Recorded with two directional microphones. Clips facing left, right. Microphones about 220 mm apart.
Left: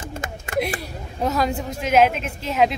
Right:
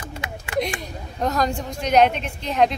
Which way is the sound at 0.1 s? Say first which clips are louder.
Left 2 dB; 45° left (ahead or behind).